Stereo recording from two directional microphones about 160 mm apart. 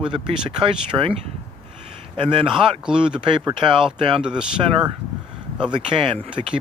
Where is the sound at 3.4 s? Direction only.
30° right (ahead or behind).